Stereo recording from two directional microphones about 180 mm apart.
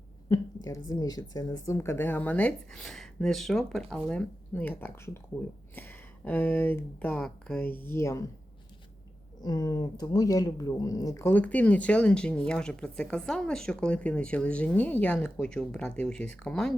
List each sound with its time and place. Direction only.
0.3 s speech: 20° left (ahead or behind)
9.4 s speech: 20° left (ahead or behind); by 16.7 s 5° left (ahead or behind)